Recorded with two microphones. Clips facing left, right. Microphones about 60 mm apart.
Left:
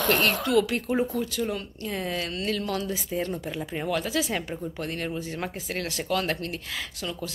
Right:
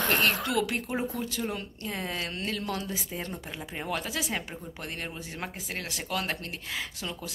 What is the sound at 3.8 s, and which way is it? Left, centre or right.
Speech, centre.